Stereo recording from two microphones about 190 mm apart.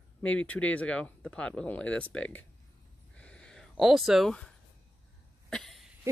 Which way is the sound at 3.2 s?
5° left (ahead or behind).